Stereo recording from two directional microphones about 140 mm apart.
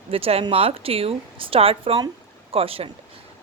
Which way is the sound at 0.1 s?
45° right (ahead or behind).